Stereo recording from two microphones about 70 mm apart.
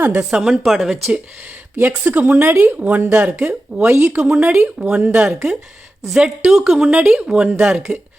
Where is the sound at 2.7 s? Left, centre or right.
Right.